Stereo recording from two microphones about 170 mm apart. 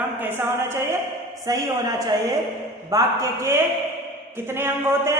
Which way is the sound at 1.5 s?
20° right (ahead or behind).